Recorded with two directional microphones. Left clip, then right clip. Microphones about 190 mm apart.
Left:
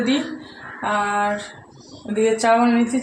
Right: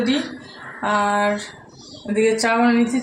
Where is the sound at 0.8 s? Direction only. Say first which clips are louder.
Right 2 dB; 20° right (ahead or behind).